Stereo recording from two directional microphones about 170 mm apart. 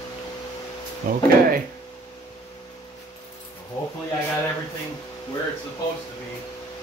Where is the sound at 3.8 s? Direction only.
20° left (ahead or behind).